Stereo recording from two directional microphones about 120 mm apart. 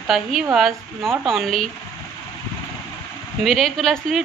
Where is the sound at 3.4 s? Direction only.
Centre (ahead or behind).